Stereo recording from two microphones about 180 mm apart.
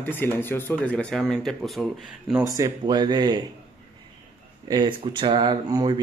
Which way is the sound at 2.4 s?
20° right (ahead or behind).